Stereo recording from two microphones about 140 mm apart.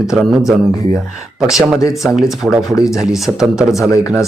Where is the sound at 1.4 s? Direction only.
5° right (ahead or behind).